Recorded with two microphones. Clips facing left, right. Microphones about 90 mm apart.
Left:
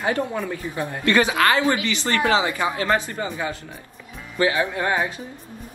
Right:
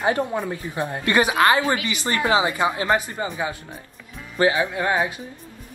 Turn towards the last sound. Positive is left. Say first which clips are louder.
# right 1 dB
turn(degrees=-10)  # may be behind; listen again after turning